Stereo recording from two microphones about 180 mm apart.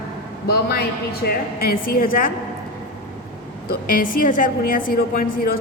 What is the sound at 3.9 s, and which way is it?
A woman's voice, 50° left (ahead or behind).